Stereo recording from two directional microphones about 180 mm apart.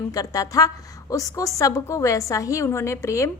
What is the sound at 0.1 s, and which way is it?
A woman's voice, 20° left (ahead or behind).